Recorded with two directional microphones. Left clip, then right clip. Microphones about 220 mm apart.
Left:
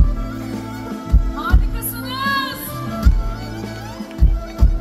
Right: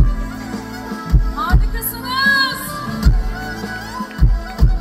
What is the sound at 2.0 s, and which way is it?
Music, 25° right (ahead or behind).